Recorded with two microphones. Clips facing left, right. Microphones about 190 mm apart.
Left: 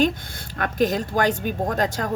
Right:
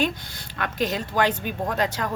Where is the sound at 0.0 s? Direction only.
50° left (ahead or behind).